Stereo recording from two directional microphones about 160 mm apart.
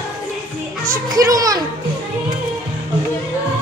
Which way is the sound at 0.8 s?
20° right (ahead or behind).